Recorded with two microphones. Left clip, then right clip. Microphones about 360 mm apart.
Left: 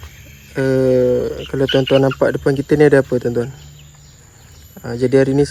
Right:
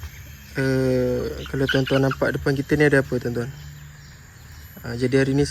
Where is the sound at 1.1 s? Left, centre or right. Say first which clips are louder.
Left 8 dB; left.